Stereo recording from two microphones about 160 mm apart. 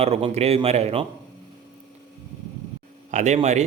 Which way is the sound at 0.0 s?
40° right (ahead or behind).